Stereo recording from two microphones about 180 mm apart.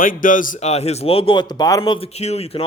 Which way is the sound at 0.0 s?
50° left (ahead or behind).